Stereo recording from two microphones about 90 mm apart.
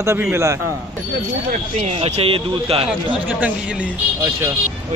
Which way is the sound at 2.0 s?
90° right.